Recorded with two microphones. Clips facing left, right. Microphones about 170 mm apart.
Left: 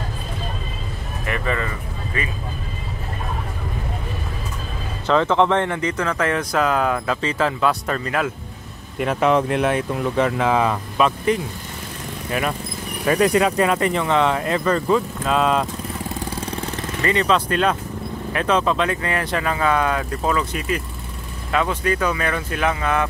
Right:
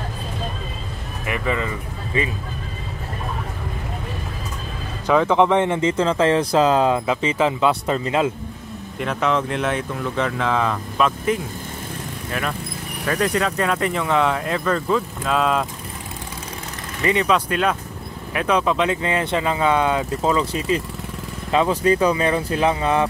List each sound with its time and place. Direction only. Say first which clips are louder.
1.2 s speech: right 1 dB; 10° right (ahead or behind)
5.0 s speech: right 1 dB; 10° right (ahead or behind)
10.1 s speech: left 3 dB; 10° left (ahead or behind)
11.0 s speech: left 1 dB; centre (ahead or behind)
12.3 s speech: left 3 dB; 10° left (ahead or behind)
17.0 s speech: even; 15° right (ahead or behind); by 23.0 s 30° right (ahead or behind)